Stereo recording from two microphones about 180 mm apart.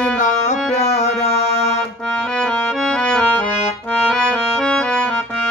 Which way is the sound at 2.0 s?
5° left (ahead or behind).